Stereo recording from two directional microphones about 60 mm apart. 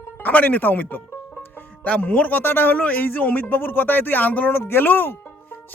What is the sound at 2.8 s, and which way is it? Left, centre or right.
Speech, left.